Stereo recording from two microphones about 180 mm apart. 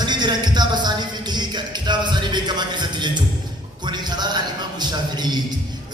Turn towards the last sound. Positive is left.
turn(degrees=-25)  # may be behind; listen again after turning